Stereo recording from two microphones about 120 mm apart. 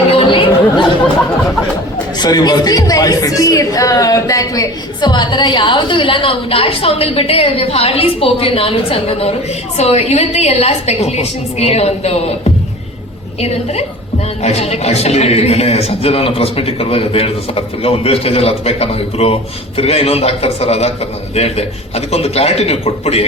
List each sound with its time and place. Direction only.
0.1 s chatter: 45° left (ahead or behind)
2.1 s a woman's voice: 35° left (ahead or behind); by 12.4 s 60° left (ahead or behind)
14.4 s a man's voice: 60° left (ahead or behind)